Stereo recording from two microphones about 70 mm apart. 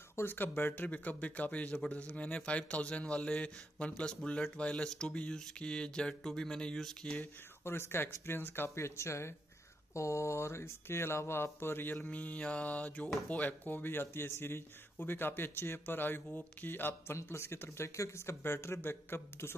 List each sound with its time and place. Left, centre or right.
0.1 s speech: left; by 7.2 s centre
7.6 s speech: left
12.1 s mantra: left
13.3 s speech: left